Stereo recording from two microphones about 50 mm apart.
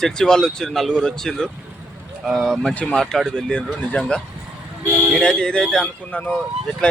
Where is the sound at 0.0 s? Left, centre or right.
Centre.